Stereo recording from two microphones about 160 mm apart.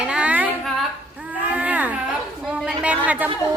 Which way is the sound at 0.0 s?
5° right (ahead or behind).